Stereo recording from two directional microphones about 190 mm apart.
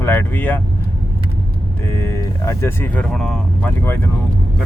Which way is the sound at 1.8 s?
15° left (ahead or behind).